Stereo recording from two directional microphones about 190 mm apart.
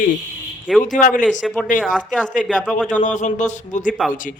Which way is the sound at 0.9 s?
40° left (ahead or behind).